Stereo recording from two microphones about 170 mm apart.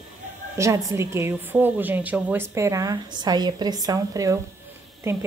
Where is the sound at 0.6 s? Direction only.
20° right (ahead or behind).